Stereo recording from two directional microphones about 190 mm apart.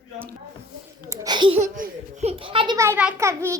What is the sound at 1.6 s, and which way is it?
A child's voice, 40° right (ahead or behind).